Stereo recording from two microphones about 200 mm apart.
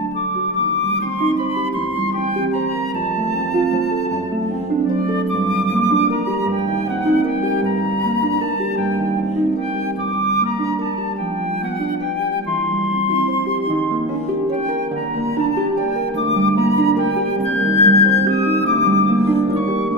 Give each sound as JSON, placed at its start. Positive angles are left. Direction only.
{"t": 17.7, "sound": "music", "side_deg": -35}